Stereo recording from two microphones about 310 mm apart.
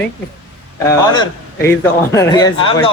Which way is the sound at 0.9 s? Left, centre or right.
Centre.